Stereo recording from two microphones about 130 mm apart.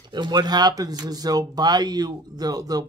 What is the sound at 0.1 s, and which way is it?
Speech, 35° right (ahead or behind).